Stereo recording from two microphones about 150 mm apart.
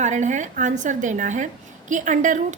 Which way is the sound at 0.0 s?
55° right (ahead or behind).